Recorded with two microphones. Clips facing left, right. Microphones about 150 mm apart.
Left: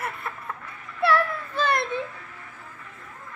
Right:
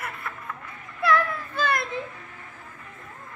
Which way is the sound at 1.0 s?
30° left (ahead or behind).